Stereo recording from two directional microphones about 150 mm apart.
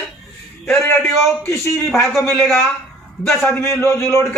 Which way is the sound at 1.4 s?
15° left (ahead or behind).